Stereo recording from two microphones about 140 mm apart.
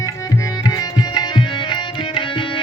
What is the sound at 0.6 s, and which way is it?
Music, 30° left (ahead or behind).